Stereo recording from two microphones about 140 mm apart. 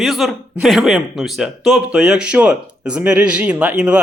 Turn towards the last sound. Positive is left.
turn(degrees=-10)  # may be behind; listen again after turning